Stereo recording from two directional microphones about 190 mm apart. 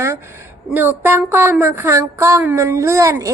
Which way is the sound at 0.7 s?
10° right (ahead or behind).